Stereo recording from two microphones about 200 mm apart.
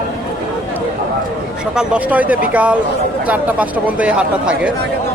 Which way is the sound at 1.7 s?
5° right (ahead or behind).